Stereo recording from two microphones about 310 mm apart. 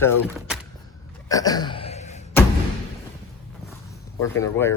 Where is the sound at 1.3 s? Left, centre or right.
Centre.